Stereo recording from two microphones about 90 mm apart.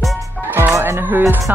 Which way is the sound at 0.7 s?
30° right (ahead or behind).